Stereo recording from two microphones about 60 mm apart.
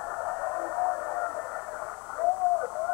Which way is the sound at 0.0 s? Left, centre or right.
Centre.